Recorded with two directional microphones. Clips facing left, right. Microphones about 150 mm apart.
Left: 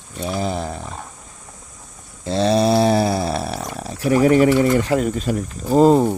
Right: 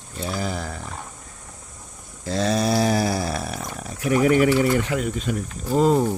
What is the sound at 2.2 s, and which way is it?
Speech, 25° left (ahead or behind).